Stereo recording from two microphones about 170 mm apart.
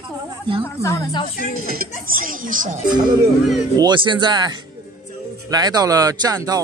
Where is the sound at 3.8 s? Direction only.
25° right (ahead or behind).